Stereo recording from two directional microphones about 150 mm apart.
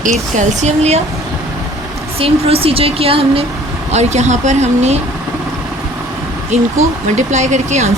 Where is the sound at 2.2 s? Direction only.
40° right (ahead or behind).